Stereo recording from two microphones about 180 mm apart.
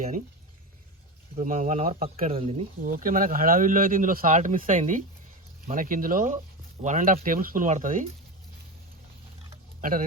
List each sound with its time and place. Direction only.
1.4 s speech: 40° right (ahead or behind)
2.9 s speech: 50° right (ahead or behind)